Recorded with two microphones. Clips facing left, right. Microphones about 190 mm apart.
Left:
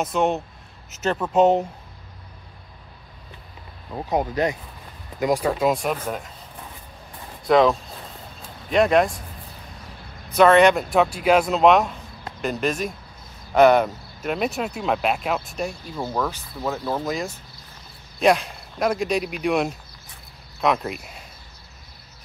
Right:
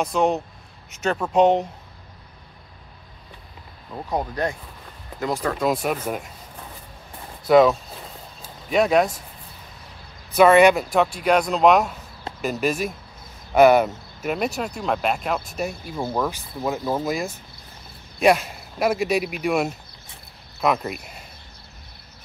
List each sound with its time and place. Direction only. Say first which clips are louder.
0.0 s speech: right 1 dB; centre (ahead or behind)
3.9 s speech: left 3 dB; 15° left (ahead or behind)
5.7 s speech: even; 5° right (ahead or behind)
7.4 s speech: right 2 dB; 5° right (ahead or behind)
8.4 s a sound: left 1 dB; centre (ahead or behind)
10.3 s speech: right 1 dB; 10° right (ahead or behind)